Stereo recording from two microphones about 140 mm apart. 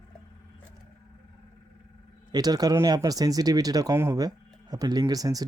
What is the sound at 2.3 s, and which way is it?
Speech, 30° right (ahead or behind).